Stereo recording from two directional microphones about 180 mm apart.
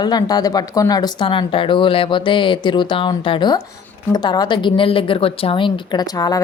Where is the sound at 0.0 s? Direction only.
20° left (ahead or behind).